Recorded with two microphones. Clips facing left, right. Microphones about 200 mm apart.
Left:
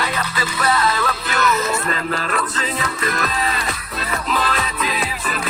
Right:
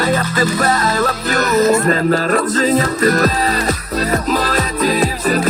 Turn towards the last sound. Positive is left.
turn(degrees=-40)  # may be behind; listen again after turning